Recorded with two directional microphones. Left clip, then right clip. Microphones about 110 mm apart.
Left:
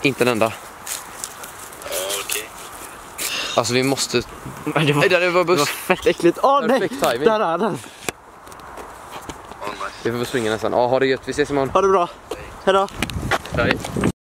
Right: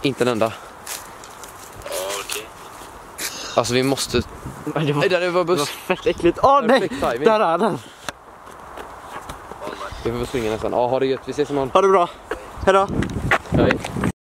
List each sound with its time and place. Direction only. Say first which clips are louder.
0.0 s speech: left 2 dB; 10° left (ahead or behind)
1.9 s a sound: left 1 dB; centre (ahead or behind)
3.6 s speech: even; centre (ahead or behind)
4.7 s speech: left 4 dB; 45° left (ahead or behind)
5.0 s speech: left 1 dB; 10° left (ahead or behind)
5.7 s speech: left 3 dB; 40° left (ahead or behind)
6.4 s speech: right 3 dB; 10° right (ahead or behind)
7.0 s speech: left 2 dB; 35° left (ahead or behind)
7.2 s speech: right 4 dB; centre (ahead or behind)
9.7 s speech: left 2 dB; 40° left (ahead or behind)
11.7 s speech: right 2 dB; 5° right (ahead or behind)
12.6 s a sound: right 1 dB; centre (ahead or behind)